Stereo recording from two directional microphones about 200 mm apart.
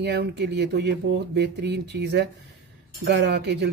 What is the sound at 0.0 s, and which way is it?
Speech, 55° right (ahead or behind).